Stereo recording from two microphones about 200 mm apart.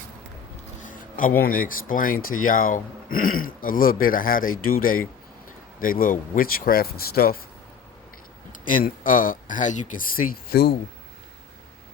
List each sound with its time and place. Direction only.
0.8 s a sound: 40° left (ahead or behind)
1.4 s speech: 45° left (ahead or behind)
8.7 s speech: 45° left (ahead or behind)